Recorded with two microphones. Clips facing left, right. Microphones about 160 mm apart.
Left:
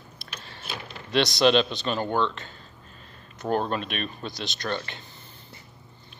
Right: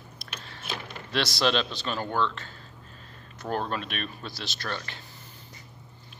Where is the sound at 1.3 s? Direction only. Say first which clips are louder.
Left 6 dB; centre (ahead or behind).